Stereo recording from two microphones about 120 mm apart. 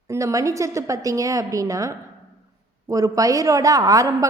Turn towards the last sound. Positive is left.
turn(degrees=-30)  # may be behind; listen again after turning